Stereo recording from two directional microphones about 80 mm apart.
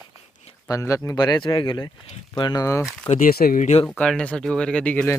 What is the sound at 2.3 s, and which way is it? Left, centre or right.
Speech, left.